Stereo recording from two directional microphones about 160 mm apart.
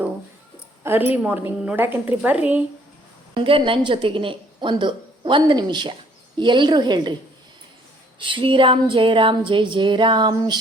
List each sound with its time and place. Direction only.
0.9 s a woman's voice: 10° right (ahead or behind)
3.3 s a woman's voice: 35° right (ahead or behind)
8.2 s a sound: 35° right (ahead or behind)